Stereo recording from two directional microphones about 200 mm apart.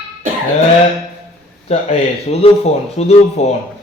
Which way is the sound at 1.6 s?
30° left (ahead or behind).